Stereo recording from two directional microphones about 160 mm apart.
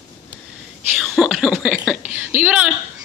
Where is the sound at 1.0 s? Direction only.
Centre (ahead or behind).